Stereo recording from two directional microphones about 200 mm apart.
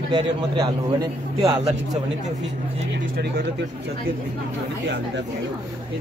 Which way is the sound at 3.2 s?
55° right (ahead or behind).